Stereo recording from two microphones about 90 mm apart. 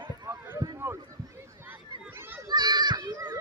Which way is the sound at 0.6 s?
50° right (ahead or behind).